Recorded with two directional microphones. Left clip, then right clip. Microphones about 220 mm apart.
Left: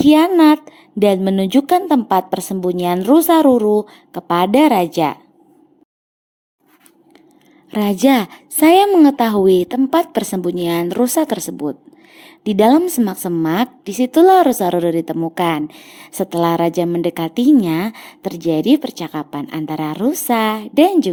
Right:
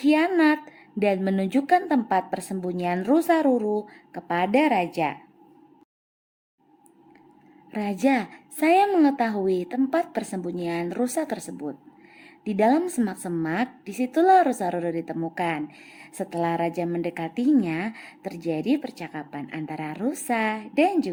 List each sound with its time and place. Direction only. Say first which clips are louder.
0.0 s a woman's voice: left 10 dB; 30° left (ahead or behind)
7.7 s a woman's voice: left 9 dB; 35° left (ahead or behind)